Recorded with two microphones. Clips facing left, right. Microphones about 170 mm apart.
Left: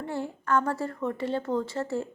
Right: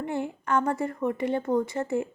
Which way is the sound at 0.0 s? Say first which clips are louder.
Right 2 dB; 15° right (ahead or behind).